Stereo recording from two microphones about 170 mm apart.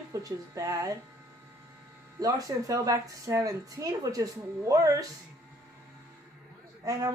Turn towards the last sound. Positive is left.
turn(degrees=-20)  # may be behind; listen again after turning